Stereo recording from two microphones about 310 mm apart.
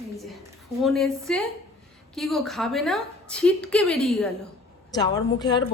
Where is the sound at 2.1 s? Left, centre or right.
Centre.